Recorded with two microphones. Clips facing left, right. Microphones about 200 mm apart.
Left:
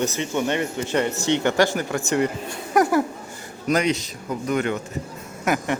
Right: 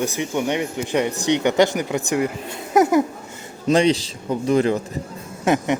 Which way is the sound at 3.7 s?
30° right (ahead or behind).